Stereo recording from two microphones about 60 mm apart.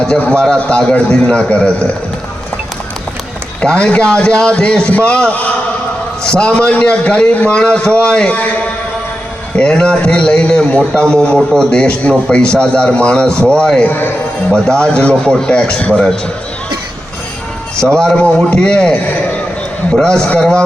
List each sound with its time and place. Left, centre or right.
0.4 s a man's voice: centre
3.6 s a man's voice: centre
8.3 s a man's voice: left
9.6 s a man's voice: centre
13.3 s speech: right
13.6 s a man's voice: centre
13.8 s a man's voice: left
14.5 s a man's voice: centre
17.9 s a man's voice: centre
19.0 s a man's voice: left
19.9 s a man's voice: centre